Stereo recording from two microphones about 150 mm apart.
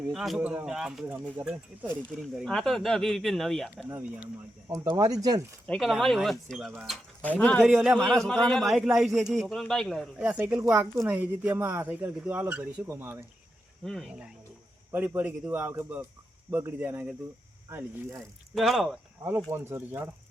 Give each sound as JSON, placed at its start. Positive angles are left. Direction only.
{"t": 0.1, "sound": "a man's voice", "side_deg": 0}
{"t": 2.2, "sound": "a man's voice", "side_deg": 0}
{"t": 3.8, "sound": "speech", "side_deg": -10}
{"t": 5.6, "sound": "a man's voice", "side_deg": 5}
{"t": 10.2, "sound": "speech", "side_deg": -10}
{"t": 13.8, "sound": "a man's voice", "side_deg": 0}
{"t": 18.5, "sound": "a man's voice", "side_deg": 0}
{"t": 19.5, "sound": "speech", "side_deg": -15}